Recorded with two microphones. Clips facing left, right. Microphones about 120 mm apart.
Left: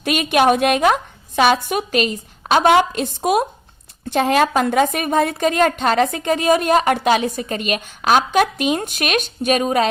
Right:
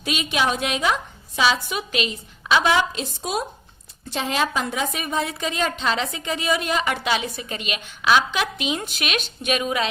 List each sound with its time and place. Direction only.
0.0 s a woman's voice: 55° left (ahead or behind)